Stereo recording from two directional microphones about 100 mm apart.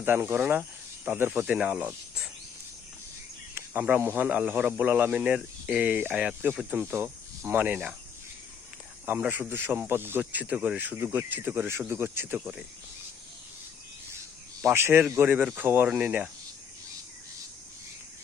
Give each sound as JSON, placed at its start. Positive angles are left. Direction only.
{"t": 0.0, "sound": "speech", "side_deg": -20}
{"t": 3.7, "sound": "speech", "side_deg": -20}
{"t": 9.0, "sound": "speech", "side_deg": -20}
{"t": 14.7, "sound": "speech", "side_deg": -20}